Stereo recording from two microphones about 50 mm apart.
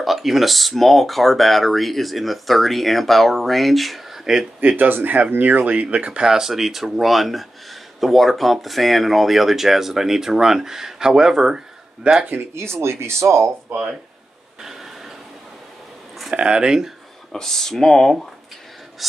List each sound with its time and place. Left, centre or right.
0.0 s speech: centre
4.6 s speech: right
6.2 s speech: centre
12.5 s speech: right
14.6 s a sound: centre
16.3 s speech: centre
17.3 s speech: centre